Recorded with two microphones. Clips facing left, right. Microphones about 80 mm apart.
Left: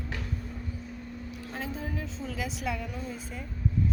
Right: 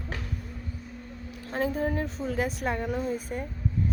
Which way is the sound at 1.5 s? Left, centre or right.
Right.